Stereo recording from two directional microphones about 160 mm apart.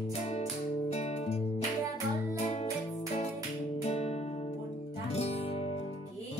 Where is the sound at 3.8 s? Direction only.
40° left (ahead or behind).